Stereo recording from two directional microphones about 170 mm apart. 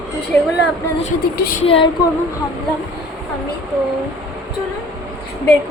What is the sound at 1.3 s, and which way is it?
Speech, 65° left (ahead or behind).